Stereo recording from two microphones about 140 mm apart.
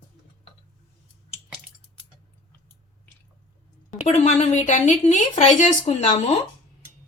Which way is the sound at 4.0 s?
50° left (ahead or behind).